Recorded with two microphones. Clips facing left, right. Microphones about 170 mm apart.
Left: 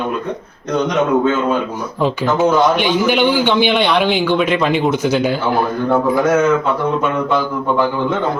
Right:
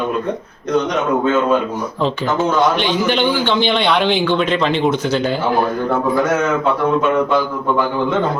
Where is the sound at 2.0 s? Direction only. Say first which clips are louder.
Left 3 dB; 10° left (ahead or behind).